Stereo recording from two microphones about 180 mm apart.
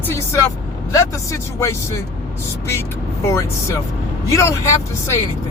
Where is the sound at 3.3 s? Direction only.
15° left (ahead or behind).